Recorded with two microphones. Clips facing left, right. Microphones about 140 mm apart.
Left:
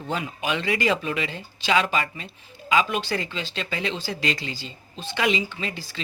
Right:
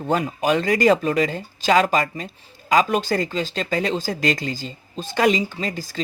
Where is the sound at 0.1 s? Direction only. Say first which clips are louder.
Right 7 dB; 45° right (ahead or behind).